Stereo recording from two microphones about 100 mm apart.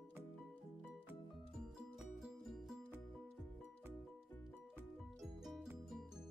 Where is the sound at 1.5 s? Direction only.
5° right (ahead or behind).